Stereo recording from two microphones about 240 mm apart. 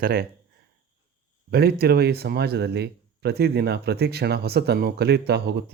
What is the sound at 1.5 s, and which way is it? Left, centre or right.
Speech, right.